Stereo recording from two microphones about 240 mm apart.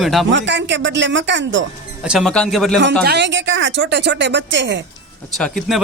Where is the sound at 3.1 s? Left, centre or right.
Right.